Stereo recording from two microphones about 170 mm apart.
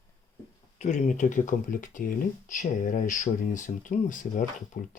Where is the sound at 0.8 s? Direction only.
45° left (ahead or behind).